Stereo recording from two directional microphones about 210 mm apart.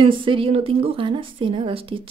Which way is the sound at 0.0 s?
25° right (ahead or behind).